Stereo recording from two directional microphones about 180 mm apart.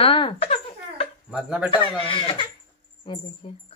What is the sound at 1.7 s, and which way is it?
Speech, 30° left (ahead or behind).